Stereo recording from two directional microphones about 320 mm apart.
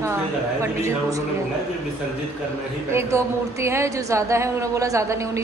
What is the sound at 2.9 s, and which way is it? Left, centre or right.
A woman's voice, centre.